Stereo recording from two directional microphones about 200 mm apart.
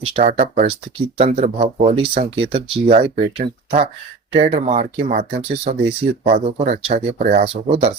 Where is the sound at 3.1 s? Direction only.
45° right (ahead or behind).